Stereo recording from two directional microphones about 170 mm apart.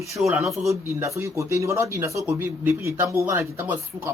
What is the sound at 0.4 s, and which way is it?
Speech, centre (ahead or behind).